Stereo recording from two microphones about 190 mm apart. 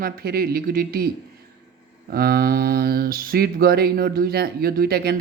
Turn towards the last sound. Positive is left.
turn(degrees=-55)  # may be behind; listen again after turning